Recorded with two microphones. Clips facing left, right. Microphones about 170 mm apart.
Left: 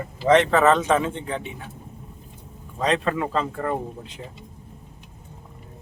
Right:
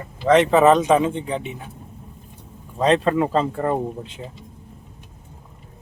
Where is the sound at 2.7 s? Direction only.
30° right (ahead or behind).